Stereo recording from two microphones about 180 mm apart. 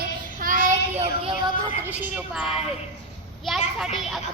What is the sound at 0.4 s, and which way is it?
Child singing, 45° right (ahead or behind).